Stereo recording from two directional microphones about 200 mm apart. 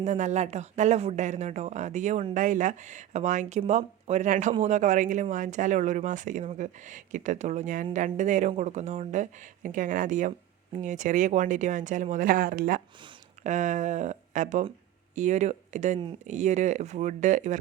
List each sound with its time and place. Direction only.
0.0 s speech: 35° right (ahead or behind)